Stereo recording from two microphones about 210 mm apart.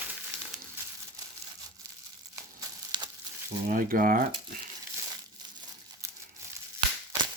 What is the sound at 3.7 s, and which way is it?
Speech, 40° right (ahead or behind).